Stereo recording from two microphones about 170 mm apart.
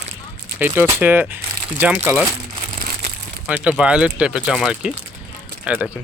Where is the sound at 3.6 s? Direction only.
5° right (ahead or behind).